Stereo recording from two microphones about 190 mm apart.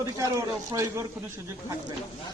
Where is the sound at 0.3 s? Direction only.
15° right (ahead or behind).